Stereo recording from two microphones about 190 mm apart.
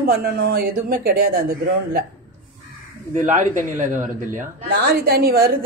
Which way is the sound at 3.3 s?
40° right (ahead or behind).